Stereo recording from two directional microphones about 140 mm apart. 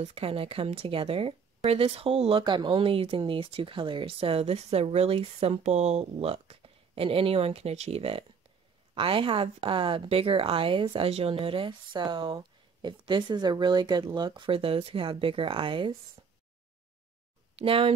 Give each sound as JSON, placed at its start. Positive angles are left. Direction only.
{"t": 0.0, "sound": "speech", "side_deg": -45}
{"t": 17.6, "sound": "speech", "side_deg": -40}